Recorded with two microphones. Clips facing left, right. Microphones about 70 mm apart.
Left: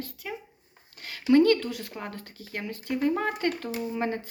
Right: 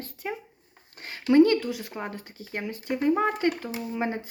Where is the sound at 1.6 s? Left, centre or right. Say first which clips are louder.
Right 2 dB; centre.